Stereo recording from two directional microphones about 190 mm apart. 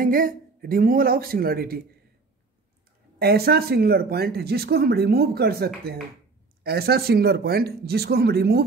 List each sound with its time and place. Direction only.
0.0 s speech: 45° right (ahead or behind)
3.2 s speech: 55° right (ahead or behind)